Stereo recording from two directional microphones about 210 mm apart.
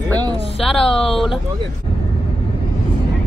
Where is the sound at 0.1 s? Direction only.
15° right (ahead or behind).